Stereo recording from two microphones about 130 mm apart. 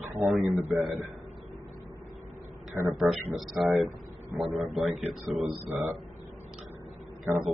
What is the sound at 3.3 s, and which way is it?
Speech, 35° right (ahead or behind).